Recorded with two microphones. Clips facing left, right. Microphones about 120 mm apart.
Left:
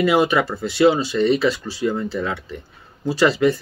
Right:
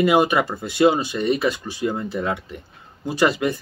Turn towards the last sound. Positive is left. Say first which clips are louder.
# left 3 dB
turn(degrees=-15)  # may be behind; listen again after turning